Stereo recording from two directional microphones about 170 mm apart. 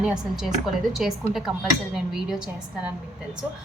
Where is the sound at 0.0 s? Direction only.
5° right (ahead or behind).